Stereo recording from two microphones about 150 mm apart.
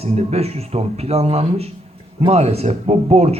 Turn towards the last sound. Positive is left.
turn(degrees=-45)  # may be behind; listen again after turning